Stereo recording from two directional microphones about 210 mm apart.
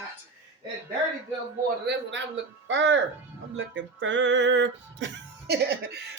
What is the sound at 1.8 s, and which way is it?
Speech, 55° right (ahead or behind).